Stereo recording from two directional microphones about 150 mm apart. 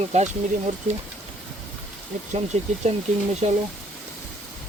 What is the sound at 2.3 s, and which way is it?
Speech, 50° right (ahead or behind).